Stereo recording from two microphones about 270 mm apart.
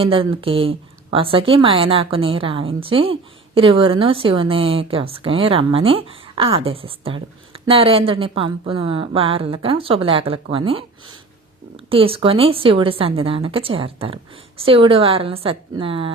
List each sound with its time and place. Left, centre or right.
0.0 s a woman's voice: centre
11.9 s a woman's voice: centre